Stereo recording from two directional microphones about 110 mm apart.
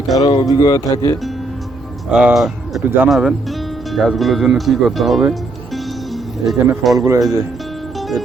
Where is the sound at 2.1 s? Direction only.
5° right (ahead or behind).